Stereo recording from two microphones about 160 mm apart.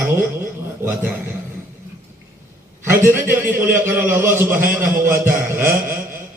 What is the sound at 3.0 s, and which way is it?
A man's voice, 15° right (ahead or behind).